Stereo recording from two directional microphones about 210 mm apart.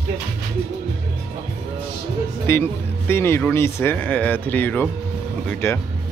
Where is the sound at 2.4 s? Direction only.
10° left (ahead or behind).